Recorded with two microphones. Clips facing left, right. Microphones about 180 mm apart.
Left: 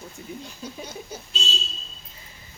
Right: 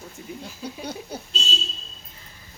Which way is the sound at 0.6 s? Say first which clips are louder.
Right 4 dB; 65° right (ahead or behind).